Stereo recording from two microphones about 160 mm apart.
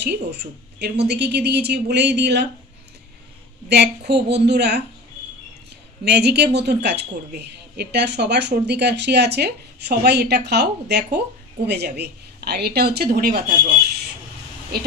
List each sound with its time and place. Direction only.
0.0 s a woman's voice: 90° right
3.6 s a woman's voice: 90° right
6.0 s a woman's voice: 90° right; by 13.4 s 70° right (ahead or behind)